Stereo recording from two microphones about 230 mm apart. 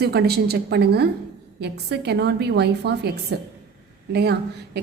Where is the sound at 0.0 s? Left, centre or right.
Right.